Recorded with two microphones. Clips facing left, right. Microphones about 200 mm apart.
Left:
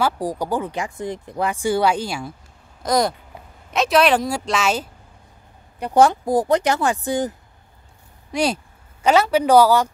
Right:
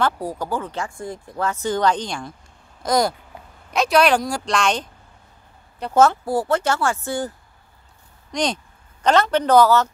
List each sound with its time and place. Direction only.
0.0 s speech: 15° left (ahead or behind)